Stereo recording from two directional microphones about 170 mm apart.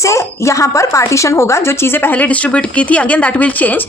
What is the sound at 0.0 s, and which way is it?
A woman's voice, 15° left (ahead or behind).